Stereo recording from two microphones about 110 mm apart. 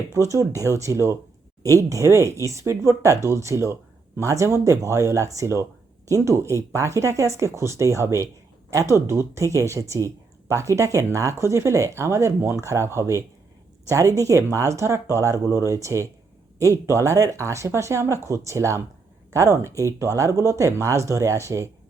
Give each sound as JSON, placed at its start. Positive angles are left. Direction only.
{"t": 0.1, "sound": "speech", "side_deg": -30}